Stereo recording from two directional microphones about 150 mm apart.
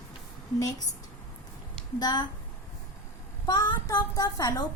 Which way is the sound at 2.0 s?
30° left (ahead or behind).